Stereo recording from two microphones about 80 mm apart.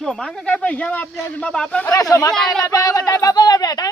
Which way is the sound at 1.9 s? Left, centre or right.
Left.